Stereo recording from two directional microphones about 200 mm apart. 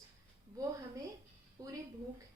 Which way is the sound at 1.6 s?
20° right (ahead or behind).